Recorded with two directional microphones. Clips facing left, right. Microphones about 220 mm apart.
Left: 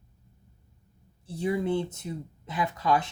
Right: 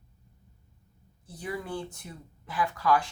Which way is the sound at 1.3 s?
25° left (ahead or behind).